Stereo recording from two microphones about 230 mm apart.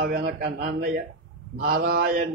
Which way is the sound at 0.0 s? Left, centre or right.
Right.